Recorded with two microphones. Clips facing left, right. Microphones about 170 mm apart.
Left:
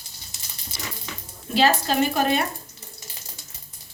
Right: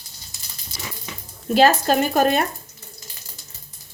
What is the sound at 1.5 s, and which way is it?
Speech, 50° right (ahead or behind).